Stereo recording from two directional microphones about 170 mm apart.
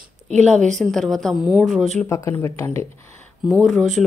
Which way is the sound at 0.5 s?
45° right (ahead or behind).